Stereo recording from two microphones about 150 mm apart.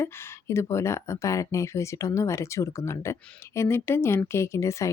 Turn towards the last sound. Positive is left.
turn(degrees=20)  # may be behind; listen again after turning